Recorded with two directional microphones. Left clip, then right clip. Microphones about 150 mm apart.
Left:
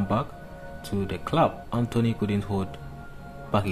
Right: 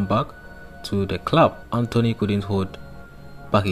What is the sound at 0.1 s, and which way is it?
Speech, 20° right (ahead or behind).